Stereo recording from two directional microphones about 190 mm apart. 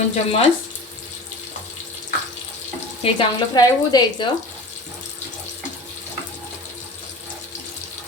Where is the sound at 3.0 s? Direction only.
25° left (ahead or behind).